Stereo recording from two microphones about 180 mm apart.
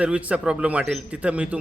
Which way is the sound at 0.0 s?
5° right (ahead or behind).